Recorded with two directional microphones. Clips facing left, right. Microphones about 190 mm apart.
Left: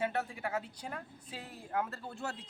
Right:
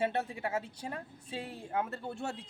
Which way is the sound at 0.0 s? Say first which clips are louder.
Right 2 dB; 25° right (ahead or behind).